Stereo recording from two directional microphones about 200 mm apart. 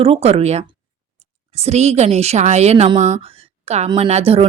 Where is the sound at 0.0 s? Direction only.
30° right (ahead or behind).